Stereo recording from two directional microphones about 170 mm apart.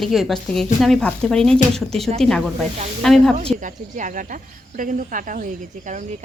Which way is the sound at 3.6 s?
50° right (ahead or behind).